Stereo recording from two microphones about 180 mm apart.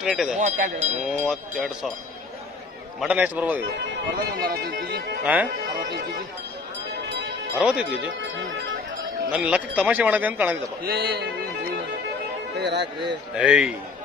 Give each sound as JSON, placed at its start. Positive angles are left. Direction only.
{"t": 0.0, "sound": "speech", "side_deg": 0}
{"t": 0.4, "sound": "speech", "side_deg": -40}
{"t": 1.3, "sound": "speech", "side_deg": -5}
{"t": 3.0, "sound": "speech", "side_deg": -5}
{"t": 3.8, "sound": "speech", "side_deg": -55}
{"t": 5.2, "sound": "speech", "side_deg": -10}
{"t": 7.5, "sound": "speech", "side_deg": -5}
{"t": 8.2, "sound": "speech", "side_deg": -80}
{"t": 9.3, "sound": "speech", "side_deg": -5}
{"t": 10.8, "sound": "speech", "side_deg": -60}
{"t": 12.5, "sound": "speech", "side_deg": -70}
{"t": 13.4, "sound": "speech", "side_deg": -5}